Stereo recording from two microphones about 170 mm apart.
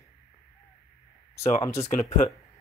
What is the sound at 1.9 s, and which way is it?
Speech, 40° left (ahead or behind).